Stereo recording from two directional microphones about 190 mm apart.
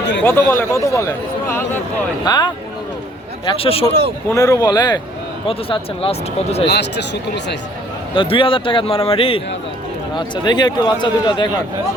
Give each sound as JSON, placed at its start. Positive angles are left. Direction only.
{"t": 0.2, "sound": "a man's voice", "side_deg": 10}
{"t": 4.3, "sound": "a man's voice", "side_deg": 15}
{"t": 6.7, "sound": "speech", "side_deg": 60}
{"t": 8.1, "sound": "a man's voice", "side_deg": 25}